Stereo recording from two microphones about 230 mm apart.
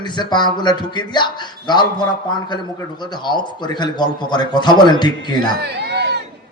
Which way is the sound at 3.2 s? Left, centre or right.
Centre.